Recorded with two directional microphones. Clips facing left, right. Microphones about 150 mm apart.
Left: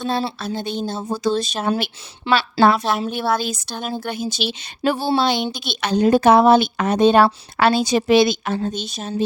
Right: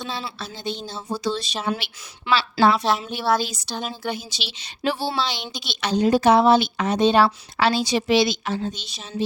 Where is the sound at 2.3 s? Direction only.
30° left (ahead or behind).